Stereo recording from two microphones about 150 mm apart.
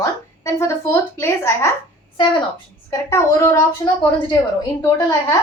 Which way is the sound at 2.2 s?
30° left (ahead or behind).